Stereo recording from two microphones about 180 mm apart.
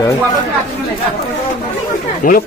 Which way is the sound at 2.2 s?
50° left (ahead or behind).